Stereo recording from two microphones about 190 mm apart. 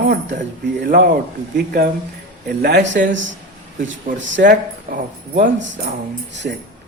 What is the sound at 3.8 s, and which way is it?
Speech, 45° right (ahead or behind).